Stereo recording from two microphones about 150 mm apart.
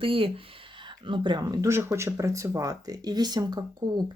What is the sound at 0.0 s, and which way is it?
Speech, 35° right (ahead or behind).